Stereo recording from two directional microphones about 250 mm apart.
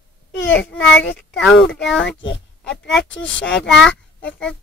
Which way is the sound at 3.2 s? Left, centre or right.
Left.